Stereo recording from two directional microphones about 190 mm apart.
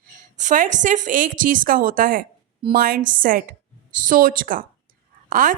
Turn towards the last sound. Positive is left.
turn(degrees=-45)  # may be behind; listen again after turning